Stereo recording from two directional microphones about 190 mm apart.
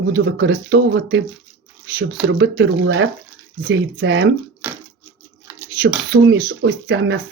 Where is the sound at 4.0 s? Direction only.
65° right (ahead or behind).